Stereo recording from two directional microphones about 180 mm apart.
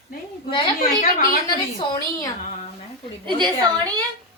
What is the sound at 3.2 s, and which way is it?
Speech, 25° right (ahead or behind).